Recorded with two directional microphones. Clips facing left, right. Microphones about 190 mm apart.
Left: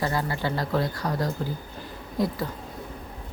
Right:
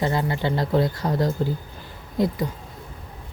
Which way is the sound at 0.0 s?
20° right (ahead or behind).